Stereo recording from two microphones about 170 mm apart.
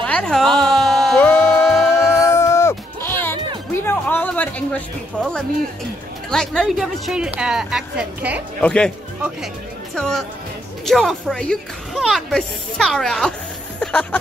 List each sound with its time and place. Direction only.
0.0 s music: 5° left (ahead or behind)
6.3 s speech: 5° left (ahead or behind)
8.5 s speech: 5° left (ahead or behind)
9.9 s speech: 5° left (ahead or behind)